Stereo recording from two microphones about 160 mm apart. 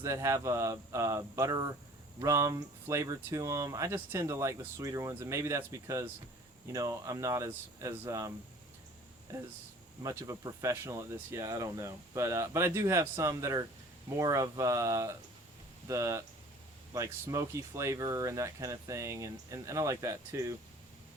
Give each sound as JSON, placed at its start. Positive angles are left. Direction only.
{"t": 0.0, "sound": "speech", "side_deg": -20}
{"t": 10.0, "sound": "speech", "side_deg": -20}